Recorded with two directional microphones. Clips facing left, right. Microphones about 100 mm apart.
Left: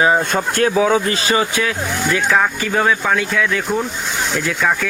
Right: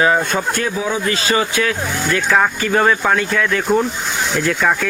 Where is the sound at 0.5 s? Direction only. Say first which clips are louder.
Left 6 dB; 60° left (ahead or behind).